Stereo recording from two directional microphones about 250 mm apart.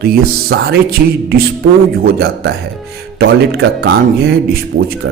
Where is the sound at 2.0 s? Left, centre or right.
Right.